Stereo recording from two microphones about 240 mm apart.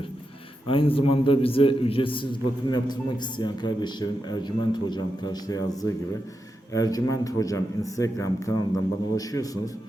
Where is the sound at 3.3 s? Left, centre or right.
Centre.